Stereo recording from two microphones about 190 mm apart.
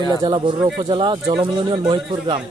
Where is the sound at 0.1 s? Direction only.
25° right (ahead or behind).